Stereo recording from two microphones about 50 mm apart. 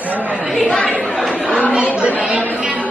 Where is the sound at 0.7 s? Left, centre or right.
Left.